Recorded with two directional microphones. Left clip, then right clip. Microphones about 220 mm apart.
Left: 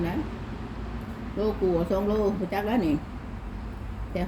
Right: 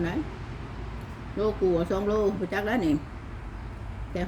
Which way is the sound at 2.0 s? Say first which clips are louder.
Even; 15° right (ahead or behind).